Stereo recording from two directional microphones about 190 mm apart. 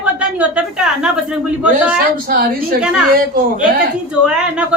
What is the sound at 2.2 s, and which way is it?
Speech, 50° right (ahead or behind).